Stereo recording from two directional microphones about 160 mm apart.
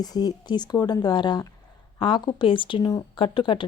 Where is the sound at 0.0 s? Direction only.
25° left (ahead or behind).